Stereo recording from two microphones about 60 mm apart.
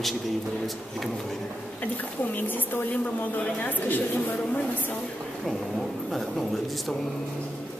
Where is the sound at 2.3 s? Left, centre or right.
Left.